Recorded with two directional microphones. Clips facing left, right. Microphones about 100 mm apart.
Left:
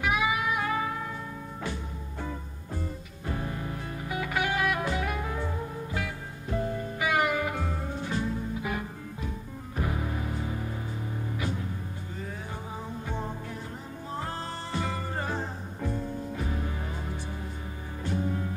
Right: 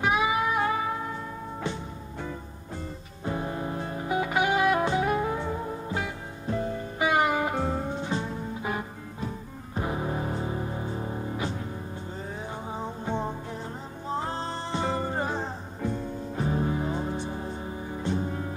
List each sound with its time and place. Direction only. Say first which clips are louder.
0.0 s music: right 3 dB; 30° right (ahead or behind)
3.3 s music: right 4 dB; 25° right (ahead or behind)
12.7 s music: right 5 dB; 25° right (ahead or behind)